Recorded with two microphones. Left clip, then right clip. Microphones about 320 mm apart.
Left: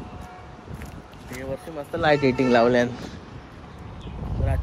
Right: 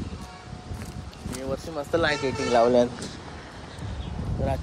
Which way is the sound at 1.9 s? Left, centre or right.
Right.